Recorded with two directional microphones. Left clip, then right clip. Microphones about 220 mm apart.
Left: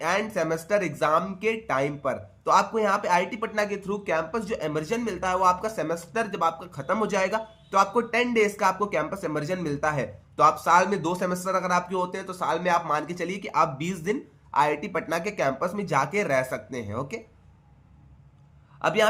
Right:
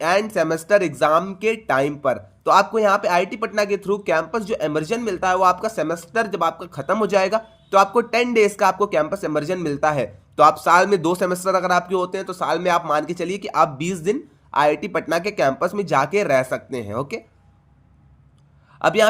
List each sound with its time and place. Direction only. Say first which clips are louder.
0.0 s speech: right 7 dB; 40° right (ahead or behind)
18.8 s a man's voice: right 6 dB; 40° right (ahead or behind)